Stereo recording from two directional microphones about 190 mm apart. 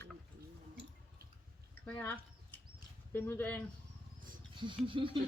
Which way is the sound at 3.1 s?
10° left (ahead or behind).